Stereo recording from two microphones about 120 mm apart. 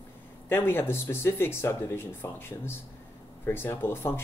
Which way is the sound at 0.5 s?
20° left (ahead or behind).